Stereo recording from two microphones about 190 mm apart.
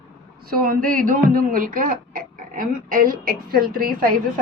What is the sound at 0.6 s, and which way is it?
A woman's voice, 50° right (ahead or behind).